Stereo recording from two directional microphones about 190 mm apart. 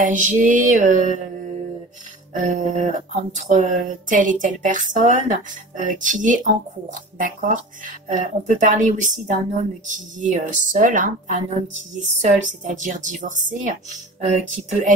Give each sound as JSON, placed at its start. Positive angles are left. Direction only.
{"t": 0.0, "sound": "music", "side_deg": -45}
{"t": 2.3, "sound": "music", "side_deg": -40}
{"t": 3.3, "sound": "speech", "side_deg": -40}
{"t": 12.8, "sound": "music", "side_deg": -40}